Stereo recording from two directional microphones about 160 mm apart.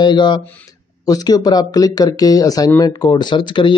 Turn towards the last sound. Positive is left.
turn(degrees=30)  # may be behind; listen again after turning